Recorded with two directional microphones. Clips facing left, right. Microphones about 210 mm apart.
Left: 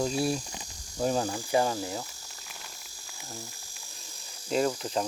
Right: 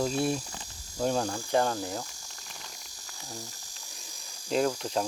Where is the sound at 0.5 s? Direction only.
10° left (ahead or behind).